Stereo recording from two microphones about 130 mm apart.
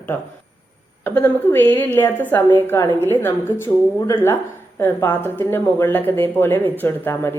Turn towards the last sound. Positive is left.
turn(degrees=15)  # may be behind; listen again after turning